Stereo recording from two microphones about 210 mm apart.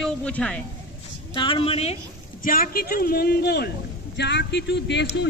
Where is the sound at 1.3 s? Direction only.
25° left (ahead or behind).